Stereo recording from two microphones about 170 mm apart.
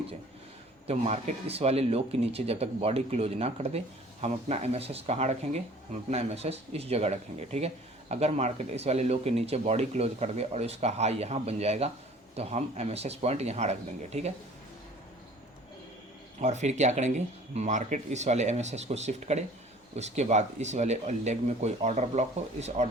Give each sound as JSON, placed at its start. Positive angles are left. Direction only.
{"t": 0.9, "sound": "speech", "side_deg": -35}
{"t": 16.4, "sound": "speech", "side_deg": -45}